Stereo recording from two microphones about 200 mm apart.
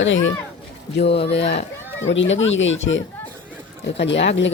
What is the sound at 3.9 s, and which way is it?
Speech, 60° left (ahead or behind).